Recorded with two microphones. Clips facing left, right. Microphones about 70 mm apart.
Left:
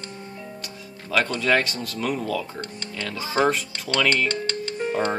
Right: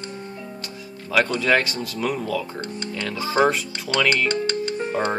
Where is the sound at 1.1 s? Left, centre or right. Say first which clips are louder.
Right 2 dB; centre.